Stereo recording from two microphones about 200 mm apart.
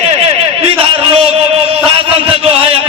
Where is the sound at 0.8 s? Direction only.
30° right (ahead or behind).